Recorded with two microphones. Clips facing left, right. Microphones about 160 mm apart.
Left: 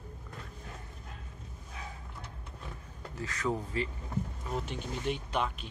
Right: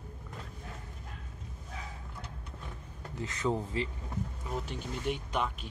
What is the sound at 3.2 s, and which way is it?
Speech, 20° right (ahead or behind).